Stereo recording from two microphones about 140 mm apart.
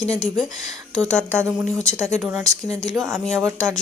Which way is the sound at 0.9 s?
15° right (ahead or behind).